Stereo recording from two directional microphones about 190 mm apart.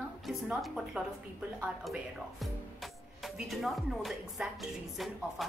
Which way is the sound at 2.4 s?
Centre (ahead or behind).